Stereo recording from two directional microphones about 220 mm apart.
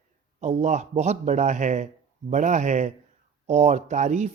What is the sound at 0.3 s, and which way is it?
Speech, 30° right (ahead or behind).